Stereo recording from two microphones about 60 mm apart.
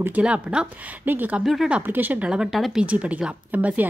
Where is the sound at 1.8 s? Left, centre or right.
Right.